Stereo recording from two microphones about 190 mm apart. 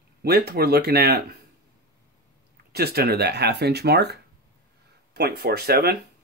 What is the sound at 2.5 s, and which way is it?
Speech, 55° right (ahead or behind).